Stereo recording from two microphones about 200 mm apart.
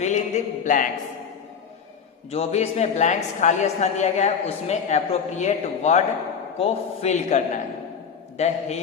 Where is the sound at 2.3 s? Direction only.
30° left (ahead or behind).